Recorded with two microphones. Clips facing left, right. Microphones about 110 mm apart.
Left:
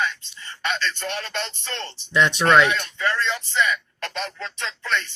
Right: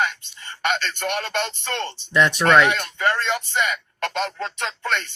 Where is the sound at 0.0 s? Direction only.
55° right (ahead or behind).